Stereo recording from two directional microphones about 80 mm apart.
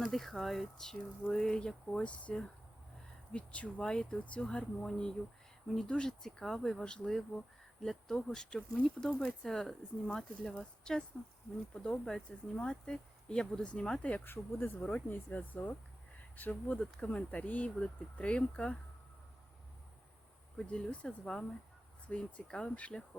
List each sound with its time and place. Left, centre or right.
0.0 s speech: centre
20.6 s speech: centre